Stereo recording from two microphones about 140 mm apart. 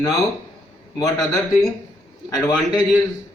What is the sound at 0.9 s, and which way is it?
Speech, 25° left (ahead or behind).